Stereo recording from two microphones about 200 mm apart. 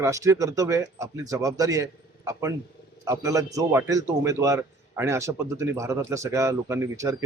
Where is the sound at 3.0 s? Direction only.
15° right (ahead or behind).